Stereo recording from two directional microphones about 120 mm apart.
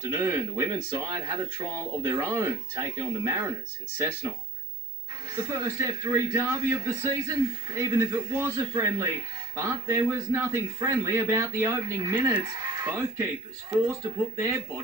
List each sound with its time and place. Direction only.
0.1 s a man's voice: 25° right (ahead or behind)
5.3 s a man's voice: 20° right (ahead or behind)
14.3 s a man's voice: 20° right (ahead or behind)